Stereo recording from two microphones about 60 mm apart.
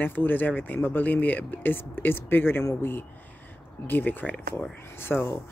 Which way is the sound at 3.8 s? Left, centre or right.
Left.